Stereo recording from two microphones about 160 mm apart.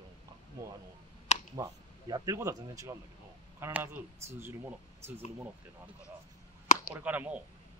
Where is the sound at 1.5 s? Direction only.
20° right (ahead or behind).